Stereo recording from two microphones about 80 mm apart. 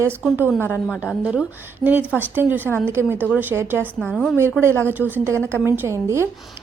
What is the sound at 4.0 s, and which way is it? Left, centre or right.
Speech, centre.